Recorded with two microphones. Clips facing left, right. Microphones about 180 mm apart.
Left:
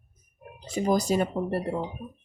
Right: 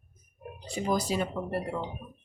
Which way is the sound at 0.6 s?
45° left (ahead or behind).